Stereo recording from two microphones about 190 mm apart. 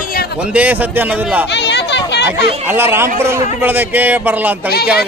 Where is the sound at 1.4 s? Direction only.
65° left (ahead or behind).